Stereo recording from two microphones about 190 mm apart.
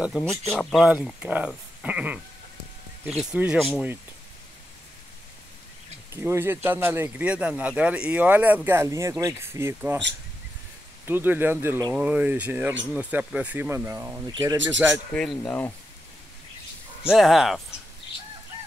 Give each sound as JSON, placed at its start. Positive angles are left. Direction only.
{"t": 0.0, "sound": "speech", "side_deg": 0}
{"t": 1.8, "sound": "a sound", "side_deg": -5}
{"t": 3.1, "sound": "speech", "side_deg": -5}
{"t": 6.1, "sound": "speech", "side_deg": -10}
{"t": 11.1, "sound": "speech", "side_deg": -10}
{"t": 15.1, "sound": "speech", "side_deg": 5}
{"t": 17.0, "sound": "speech", "side_deg": 0}